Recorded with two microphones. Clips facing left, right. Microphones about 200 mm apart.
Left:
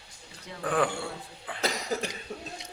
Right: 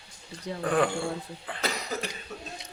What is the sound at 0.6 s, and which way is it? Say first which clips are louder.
Speech: right 2 dB; 5° left (ahead or behind).